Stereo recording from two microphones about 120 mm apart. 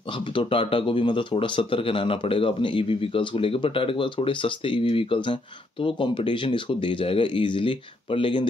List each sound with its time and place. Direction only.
0.3 s speech: 45° left (ahead or behind)